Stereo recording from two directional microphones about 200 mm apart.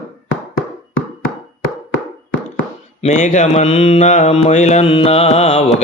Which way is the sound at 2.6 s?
40° left (ahead or behind).